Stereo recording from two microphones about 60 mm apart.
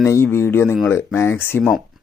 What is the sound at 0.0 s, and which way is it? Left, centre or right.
A man's voice, left.